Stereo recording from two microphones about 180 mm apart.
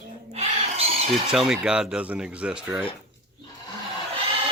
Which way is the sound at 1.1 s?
Centre (ahead or behind).